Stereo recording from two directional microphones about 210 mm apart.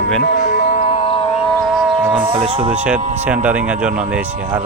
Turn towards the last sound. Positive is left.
turn(degrees=-5)  # may be behind; listen again after turning